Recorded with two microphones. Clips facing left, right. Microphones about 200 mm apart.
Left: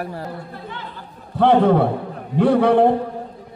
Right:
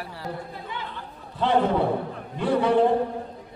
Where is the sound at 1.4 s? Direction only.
60° left (ahead or behind).